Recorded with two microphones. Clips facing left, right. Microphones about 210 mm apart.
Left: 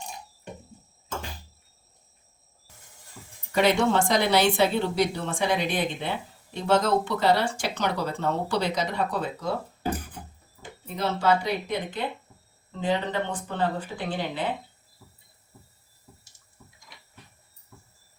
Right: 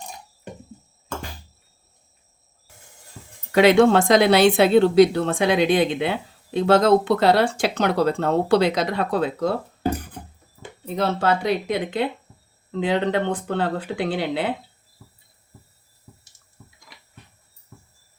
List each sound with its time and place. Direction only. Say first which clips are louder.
3.5 s speech: right 8 dB; 90° right; by 9.5 s 70° right (ahead or behind)
10.8 s speech: right 3 dB; 65° right (ahead or behind)
12.7 s speech: right 5 dB; 90° right